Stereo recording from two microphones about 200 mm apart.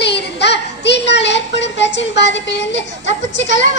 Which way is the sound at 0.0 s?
60° left (ahead or behind).